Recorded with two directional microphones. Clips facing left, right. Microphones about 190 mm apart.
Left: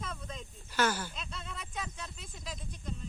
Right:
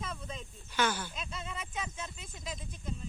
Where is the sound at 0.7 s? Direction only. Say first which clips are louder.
Left 1 dB; 10° left (ahead or behind).